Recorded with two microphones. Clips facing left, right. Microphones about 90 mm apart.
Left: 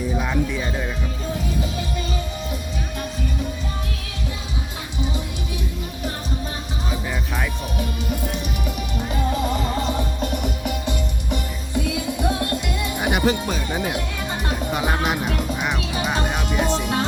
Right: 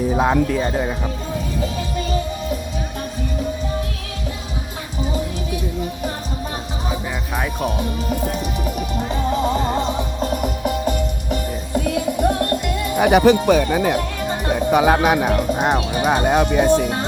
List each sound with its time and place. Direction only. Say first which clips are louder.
0.2 s speech: right 7 dB; 45° right (ahead or behind)
8.3 s music: right 4 dB; 40° right (ahead or behind)
10.2 s music: right 4 dB; 40° right (ahead or behind)
13.0 s speech: right 9 dB; 75° right (ahead or behind); by 13.8 s 90° right
14.7 s speech: right 9 dB; 70° right (ahead or behind)